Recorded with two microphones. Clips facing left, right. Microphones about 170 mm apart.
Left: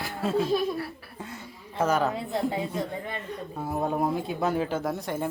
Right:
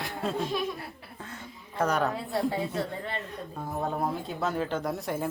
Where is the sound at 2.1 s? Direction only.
20° left (ahead or behind).